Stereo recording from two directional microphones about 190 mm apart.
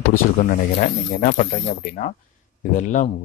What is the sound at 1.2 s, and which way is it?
Speech, 45° left (ahead or behind).